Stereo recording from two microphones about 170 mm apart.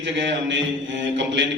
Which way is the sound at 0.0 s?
90° right.